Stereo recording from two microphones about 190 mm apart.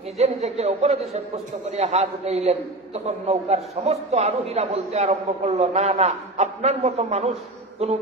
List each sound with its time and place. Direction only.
0.2 s a man's voice: 35° right (ahead or behind)